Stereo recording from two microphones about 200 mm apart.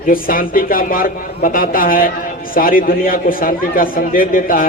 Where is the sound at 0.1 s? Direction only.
45° left (ahead or behind).